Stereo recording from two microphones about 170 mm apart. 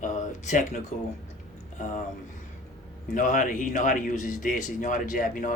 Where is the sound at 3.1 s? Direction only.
50° left (ahead or behind).